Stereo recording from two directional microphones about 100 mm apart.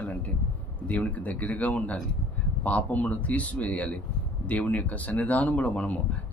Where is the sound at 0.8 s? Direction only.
15° left (ahead or behind).